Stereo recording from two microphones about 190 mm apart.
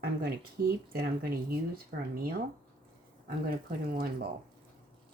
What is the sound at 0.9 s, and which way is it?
Speech, 55° right (ahead or behind).